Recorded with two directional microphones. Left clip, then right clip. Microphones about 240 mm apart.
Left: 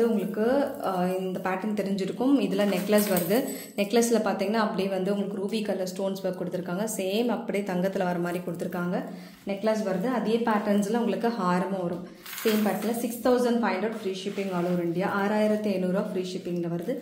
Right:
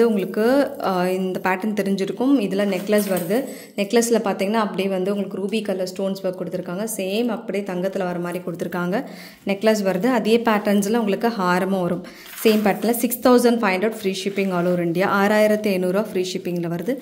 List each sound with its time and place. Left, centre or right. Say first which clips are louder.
0.0 s a woman's voice: right 7 dB; right; by 8.4 s centre
9.5 s a woman's voice: right 8 dB; right
12.4 s a woman's voice: right 8 dB; right